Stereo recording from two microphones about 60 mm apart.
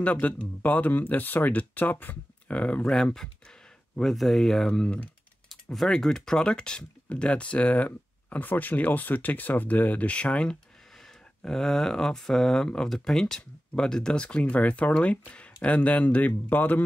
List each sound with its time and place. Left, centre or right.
0.0 s speech: left
2.5 s speech: centre
2.9 s speech: centre; by 16.8 s left